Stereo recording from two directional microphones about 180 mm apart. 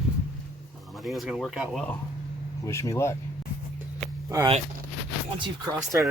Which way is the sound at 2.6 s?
15° left (ahead or behind).